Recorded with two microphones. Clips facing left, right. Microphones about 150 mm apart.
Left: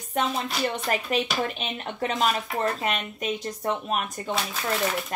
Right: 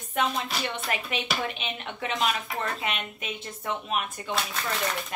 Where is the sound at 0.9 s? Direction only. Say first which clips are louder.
Left 5 dB; 40° left (ahead or behind).